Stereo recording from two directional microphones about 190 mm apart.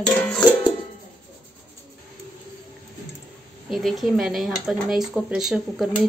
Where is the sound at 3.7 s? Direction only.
Centre (ahead or behind).